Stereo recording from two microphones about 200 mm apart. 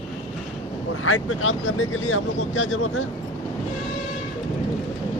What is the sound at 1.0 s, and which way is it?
Speech, 90° left.